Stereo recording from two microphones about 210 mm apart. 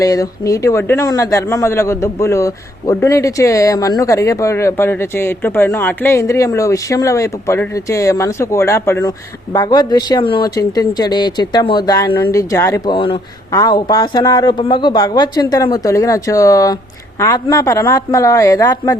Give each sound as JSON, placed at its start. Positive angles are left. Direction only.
{"t": 0.0, "sound": "a man's voice", "side_deg": 15}